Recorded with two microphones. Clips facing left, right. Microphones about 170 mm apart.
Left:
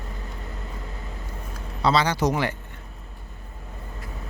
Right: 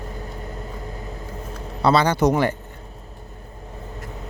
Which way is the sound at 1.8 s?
55° right (ahead or behind).